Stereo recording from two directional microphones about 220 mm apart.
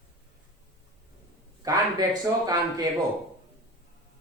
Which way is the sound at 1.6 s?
20° right (ahead or behind).